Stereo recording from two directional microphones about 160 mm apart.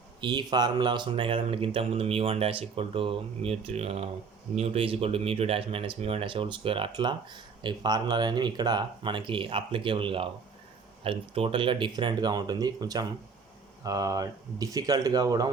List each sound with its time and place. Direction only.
0.2 s speech: 25° right (ahead or behind)